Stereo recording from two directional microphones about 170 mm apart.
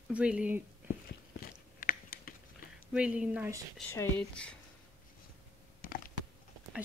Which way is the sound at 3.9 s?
10° left (ahead or behind).